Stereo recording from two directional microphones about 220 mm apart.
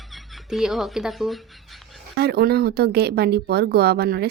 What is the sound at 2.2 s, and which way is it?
Speech, 45° right (ahead or behind).